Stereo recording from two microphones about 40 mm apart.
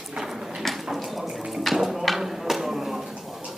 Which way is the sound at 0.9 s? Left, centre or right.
Centre.